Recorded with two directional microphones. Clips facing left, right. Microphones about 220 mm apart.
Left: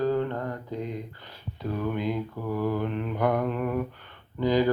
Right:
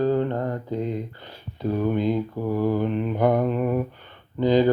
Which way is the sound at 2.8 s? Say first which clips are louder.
Right 5 dB; 25° right (ahead or behind).